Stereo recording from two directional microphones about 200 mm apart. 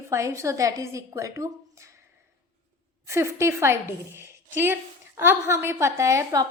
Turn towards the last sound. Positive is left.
turn(degrees=-15)  # may be behind; listen again after turning